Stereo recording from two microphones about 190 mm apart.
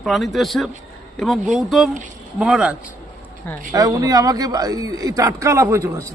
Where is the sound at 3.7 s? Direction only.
20° right (ahead or behind).